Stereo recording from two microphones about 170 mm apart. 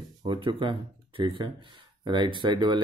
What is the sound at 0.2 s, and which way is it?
Speech, 30° right (ahead or behind).